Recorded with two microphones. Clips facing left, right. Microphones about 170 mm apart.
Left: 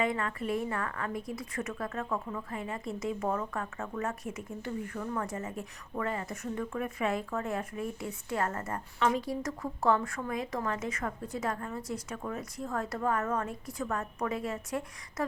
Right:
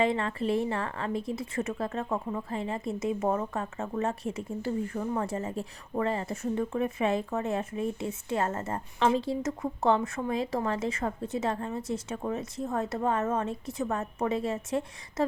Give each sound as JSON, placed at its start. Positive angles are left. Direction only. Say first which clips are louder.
{"t": 0.0, "sound": "a woman's voice", "louder": "right 4 dB", "side_deg": -30}